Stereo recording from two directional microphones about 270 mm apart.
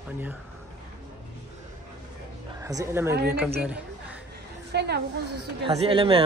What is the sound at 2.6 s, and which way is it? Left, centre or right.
Speech, centre.